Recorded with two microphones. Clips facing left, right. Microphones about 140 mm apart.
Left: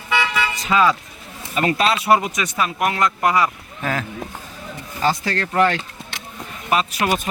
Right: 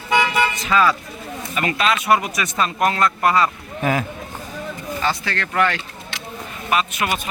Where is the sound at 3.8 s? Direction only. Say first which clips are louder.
Right 4 dB; 10° right (ahead or behind).